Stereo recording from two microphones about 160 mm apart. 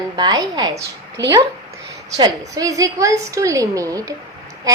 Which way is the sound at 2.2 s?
20° right (ahead or behind).